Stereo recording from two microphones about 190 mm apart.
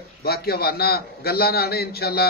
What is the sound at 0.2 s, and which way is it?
A man's voice, 55° left (ahead or behind).